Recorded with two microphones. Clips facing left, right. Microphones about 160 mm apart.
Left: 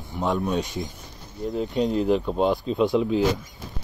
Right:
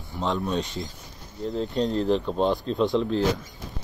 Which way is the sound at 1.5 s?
5° left (ahead or behind).